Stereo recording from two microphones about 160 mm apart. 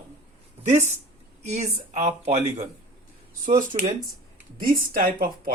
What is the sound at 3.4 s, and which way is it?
Speech, 55° right (ahead or behind).